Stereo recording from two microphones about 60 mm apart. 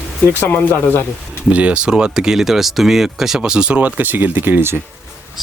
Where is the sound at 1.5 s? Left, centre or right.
Right.